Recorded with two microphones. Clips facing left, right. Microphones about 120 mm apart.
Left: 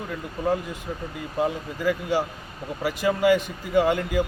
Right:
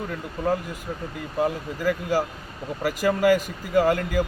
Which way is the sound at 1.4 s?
Centre (ahead or behind).